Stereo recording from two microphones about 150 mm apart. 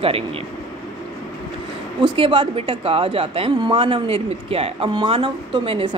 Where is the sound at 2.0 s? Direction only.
35° right (ahead or behind).